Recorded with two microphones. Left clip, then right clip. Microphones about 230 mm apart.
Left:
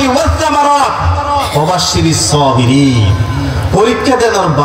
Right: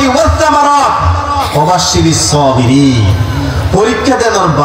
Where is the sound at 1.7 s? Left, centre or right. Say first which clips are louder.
Right 2 dB; left.